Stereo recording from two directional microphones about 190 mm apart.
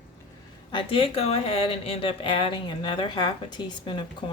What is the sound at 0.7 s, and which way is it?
Speech, 30° left (ahead or behind).